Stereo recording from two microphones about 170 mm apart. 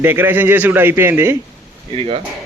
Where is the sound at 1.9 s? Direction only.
35° right (ahead or behind).